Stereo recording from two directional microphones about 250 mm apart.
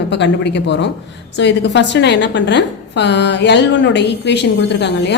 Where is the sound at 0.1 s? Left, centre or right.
Left.